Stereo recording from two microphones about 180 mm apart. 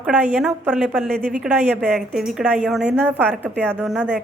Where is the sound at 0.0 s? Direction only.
Centre (ahead or behind).